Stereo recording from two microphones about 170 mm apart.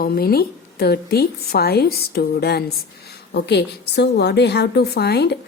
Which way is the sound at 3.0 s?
80° left.